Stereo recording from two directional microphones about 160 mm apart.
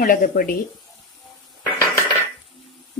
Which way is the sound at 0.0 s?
65° left (ahead or behind).